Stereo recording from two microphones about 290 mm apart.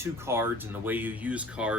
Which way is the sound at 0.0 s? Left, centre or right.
Centre.